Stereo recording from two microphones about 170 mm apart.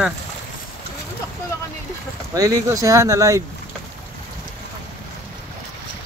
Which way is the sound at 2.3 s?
20° right (ahead or behind).